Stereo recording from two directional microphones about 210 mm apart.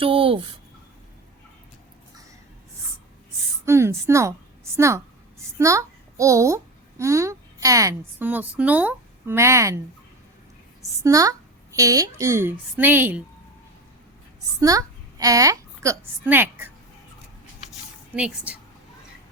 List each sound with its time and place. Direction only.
0.0 s speech: 25° right (ahead or behind)
3.7 s a woman's voice: 15° right (ahead or behind)
11.0 s a woman's voice: 15° right (ahead or behind)
14.6 s a child's voice: 15° right (ahead or behind)
18.2 s a woman's voice: 5° right (ahead or behind)